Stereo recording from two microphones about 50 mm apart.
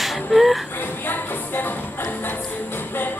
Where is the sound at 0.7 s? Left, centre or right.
Left.